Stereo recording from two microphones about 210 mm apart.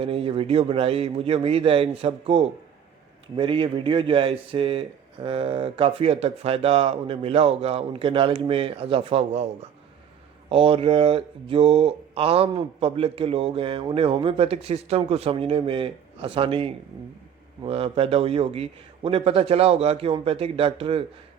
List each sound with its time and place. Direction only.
0.0 s speech: 25° right (ahead or behind)
10.5 s speech: 25° right (ahead or behind)